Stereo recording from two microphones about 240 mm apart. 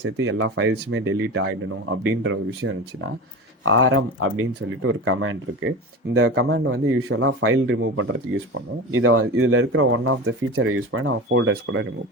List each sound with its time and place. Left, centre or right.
0.0 s speech: right
3.7 s speech: right